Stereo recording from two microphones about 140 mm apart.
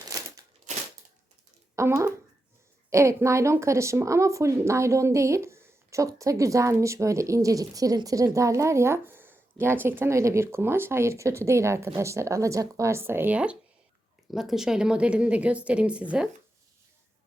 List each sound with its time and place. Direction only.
1.7 s a woman's voice: 20° right (ahead or behind)